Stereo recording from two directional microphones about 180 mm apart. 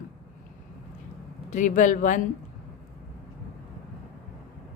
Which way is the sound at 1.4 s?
45° left (ahead or behind).